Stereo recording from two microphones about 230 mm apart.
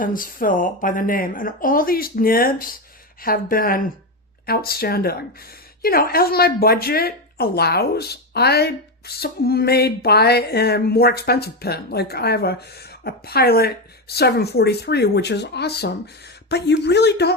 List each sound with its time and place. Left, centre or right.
0.0 s speech: left